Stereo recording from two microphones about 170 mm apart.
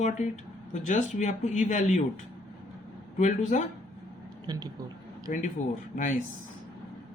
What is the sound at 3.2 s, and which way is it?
Speech, 45° left (ahead or behind).